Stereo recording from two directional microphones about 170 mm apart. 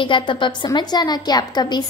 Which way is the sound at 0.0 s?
30° left (ahead or behind).